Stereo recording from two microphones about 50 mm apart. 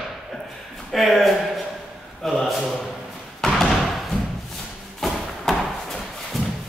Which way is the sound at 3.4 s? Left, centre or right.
Centre.